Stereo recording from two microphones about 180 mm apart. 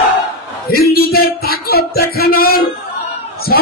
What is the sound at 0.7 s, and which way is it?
Music, 60° left (ahead or behind).